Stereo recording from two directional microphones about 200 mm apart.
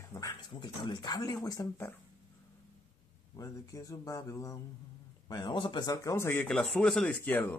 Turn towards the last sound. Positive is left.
turn(degrees=10)  # may be behind; listen again after turning